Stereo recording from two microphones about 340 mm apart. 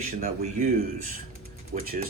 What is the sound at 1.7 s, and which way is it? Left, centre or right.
Speech, right.